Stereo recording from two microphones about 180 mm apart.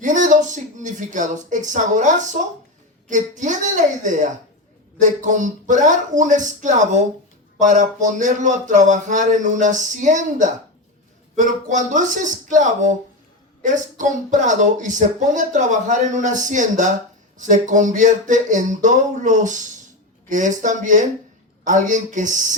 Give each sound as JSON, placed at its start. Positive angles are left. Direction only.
{"t": 0.0, "sound": "speech", "side_deg": -45}